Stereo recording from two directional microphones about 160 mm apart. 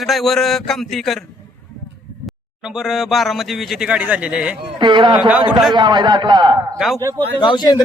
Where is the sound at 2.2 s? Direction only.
5° right (ahead or behind).